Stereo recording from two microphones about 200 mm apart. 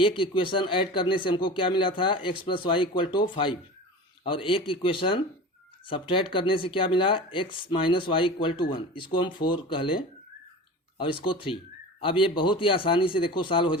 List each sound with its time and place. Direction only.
0.0 s speech: 25° left (ahead or behind)